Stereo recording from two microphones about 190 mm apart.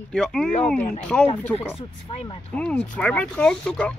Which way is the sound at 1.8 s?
30° left (ahead or behind).